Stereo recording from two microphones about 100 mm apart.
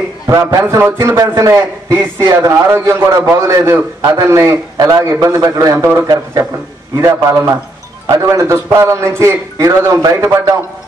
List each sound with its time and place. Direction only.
0.3 s a man's voice: 30° right (ahead or behind)